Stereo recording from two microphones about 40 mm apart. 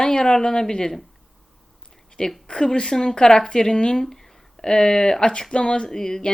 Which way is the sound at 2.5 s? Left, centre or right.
Centre.